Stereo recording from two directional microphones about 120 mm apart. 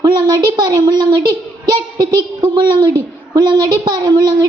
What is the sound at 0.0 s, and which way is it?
A woman's voice, 35° right (ahead or behind).